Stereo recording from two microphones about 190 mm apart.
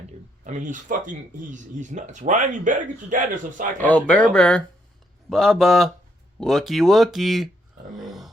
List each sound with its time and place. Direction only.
0.4 s speech: 40° right (ahead or behind)
3.8 s speech: 10° left (ahead or behind)
7.9 s grunt: centre (ahead or behind)